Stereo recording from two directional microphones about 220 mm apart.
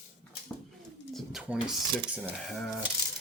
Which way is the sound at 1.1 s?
Centre (ahead or behind).